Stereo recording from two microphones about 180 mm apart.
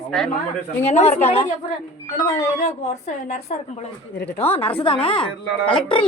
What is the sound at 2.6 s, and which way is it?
A woman's voice, 40° left (ahead or behind).